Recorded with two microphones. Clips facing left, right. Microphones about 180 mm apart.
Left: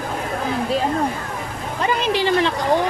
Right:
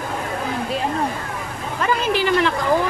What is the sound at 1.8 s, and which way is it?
Speech, 20° left (ahead or behind).